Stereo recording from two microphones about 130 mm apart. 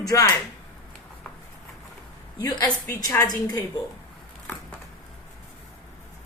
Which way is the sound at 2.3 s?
35° left (ahead or behind).